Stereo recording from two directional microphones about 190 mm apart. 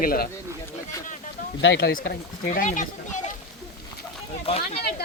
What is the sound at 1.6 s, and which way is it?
Speech, 65° left (ahead or behind).